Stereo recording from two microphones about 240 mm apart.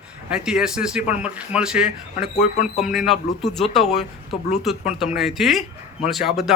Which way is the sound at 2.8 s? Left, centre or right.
Centre.